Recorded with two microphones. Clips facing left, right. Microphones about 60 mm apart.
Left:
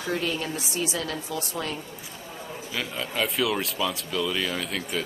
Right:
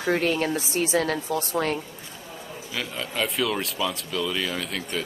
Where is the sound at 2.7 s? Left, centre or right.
Centre.